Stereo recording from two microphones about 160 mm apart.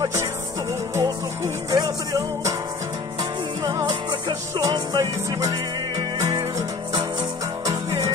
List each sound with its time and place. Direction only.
0.0 s music: 20° right (ahead or behind)